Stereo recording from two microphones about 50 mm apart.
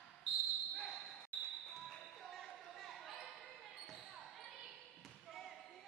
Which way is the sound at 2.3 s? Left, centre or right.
Centre.